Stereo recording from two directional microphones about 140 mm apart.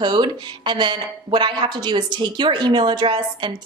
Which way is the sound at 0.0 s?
35° right (ahead or behind).